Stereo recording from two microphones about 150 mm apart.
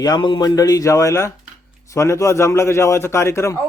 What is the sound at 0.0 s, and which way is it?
A man's voice, 30° left (ahead or behind).